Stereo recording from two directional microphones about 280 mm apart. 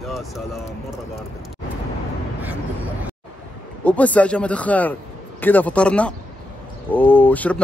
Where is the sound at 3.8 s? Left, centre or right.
Centre.